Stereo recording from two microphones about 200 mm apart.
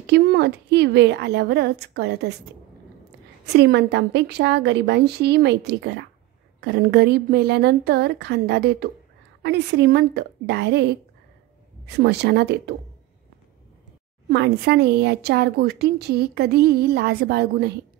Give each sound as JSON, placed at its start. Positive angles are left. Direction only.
{"t": 0.0, "sound": "a woman's voice", "side_deg": -60}
{"t": 3.5, "sound": "a woman's voice", "side_deg": -55}
{"t": 14.3, "sound": "a woman's voice", "side_deg": -55}